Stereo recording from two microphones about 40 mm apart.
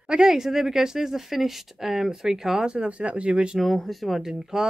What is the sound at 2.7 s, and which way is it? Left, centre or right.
Speech, right.